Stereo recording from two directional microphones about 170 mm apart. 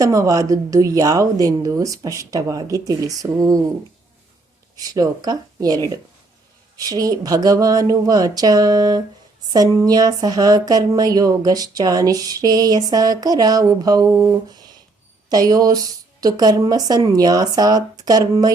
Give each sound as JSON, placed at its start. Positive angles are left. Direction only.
{"t": 0.0, "sound": "speech", "side_deg": -20}
{"t": 4.8, "sound": "speech", "side_deg": -20}